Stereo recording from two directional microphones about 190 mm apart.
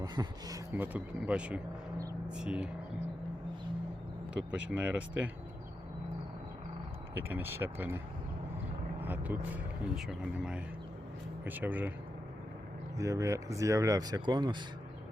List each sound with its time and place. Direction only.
0.0 s speech: 20° right (ahead or behind)
4.4 s speech: 5° right (ahead or behind)
7.1 s speech: 10° right (ahead or behind)
13.0 s speech: 15° right (ahead or behind)